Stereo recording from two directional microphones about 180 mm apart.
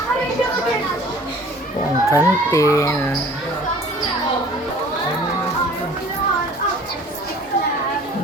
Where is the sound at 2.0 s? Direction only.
15° left (ahead or behind).